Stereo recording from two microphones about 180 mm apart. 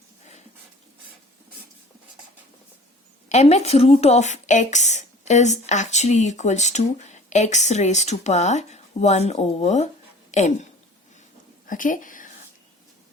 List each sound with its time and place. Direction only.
3.2 s a woman's voice: 35° left (ahead or behind)